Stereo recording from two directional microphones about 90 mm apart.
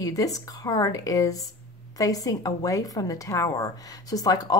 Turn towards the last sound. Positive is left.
turn(degrees=45)  # may be behind; listen again after turning